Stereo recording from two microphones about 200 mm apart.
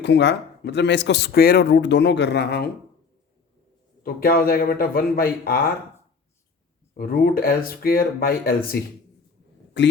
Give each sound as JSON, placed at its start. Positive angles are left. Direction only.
{"t": 0.0, "sound": "speech", "side_deg": 60}
{"t": 4.0, "sound": "speech", "side_deg": 50}
{"t": 6.9, "sound": "speech", "side_deg": 50}
{"t": 9.7, "sound": "speech", "side_deg": 60}